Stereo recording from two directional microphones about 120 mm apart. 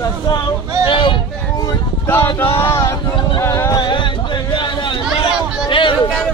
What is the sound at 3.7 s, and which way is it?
Music, 40° left (ahead or behind).